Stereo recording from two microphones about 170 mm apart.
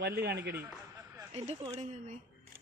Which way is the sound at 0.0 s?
70° right (ahead or behind).